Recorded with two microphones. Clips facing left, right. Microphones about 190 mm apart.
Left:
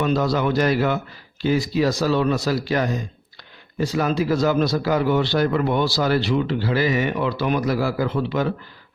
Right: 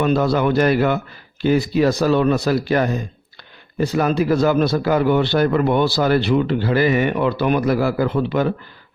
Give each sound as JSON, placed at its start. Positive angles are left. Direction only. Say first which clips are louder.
{"t": 0.0, "sound": "a man's voice", "louder": "right 3 dB", "side_deg": -55}